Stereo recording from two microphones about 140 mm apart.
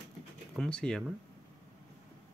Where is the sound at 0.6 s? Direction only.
5° left (ahead or behind).